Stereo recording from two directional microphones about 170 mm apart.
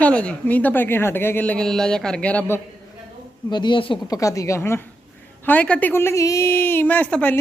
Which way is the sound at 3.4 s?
25° left (ahead or behind).